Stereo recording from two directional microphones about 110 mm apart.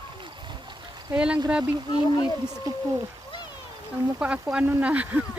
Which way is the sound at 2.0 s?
40° left (ahead or behind).